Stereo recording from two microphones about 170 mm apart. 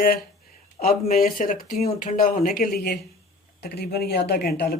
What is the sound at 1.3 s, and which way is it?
Speech, 55° left (ahead or behind).